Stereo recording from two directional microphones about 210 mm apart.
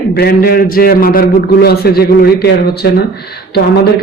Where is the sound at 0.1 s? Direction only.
45° left (ahead or behind).